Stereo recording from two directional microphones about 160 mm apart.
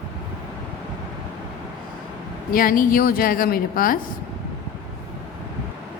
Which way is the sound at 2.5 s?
60° left (ahead or behind).